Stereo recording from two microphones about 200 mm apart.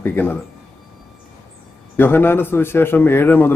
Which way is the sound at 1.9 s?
10° left (ahead or behind).